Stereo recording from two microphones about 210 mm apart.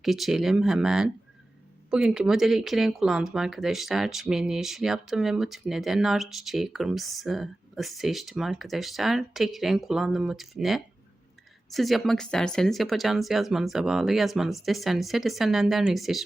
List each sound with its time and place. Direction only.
0.0 s speech: centre (ahead or behind)